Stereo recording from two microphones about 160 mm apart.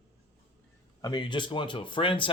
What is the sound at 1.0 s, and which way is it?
Speech, 25° left (ahead or behind).